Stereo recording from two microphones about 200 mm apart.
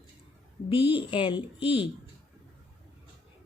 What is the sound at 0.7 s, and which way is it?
Speech, 10° right (ahead or behind).